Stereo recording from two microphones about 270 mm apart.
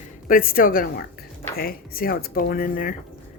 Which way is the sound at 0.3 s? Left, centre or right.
Left.